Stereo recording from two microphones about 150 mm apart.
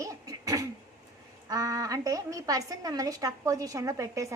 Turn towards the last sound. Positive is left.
turn(degrees=-20)  # may be behind; listen again after turning